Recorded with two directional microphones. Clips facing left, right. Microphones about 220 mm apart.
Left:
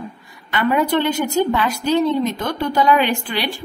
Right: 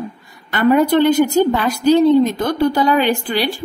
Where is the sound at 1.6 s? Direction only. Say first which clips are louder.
Right 6 dB; 35° right (ahead or behind).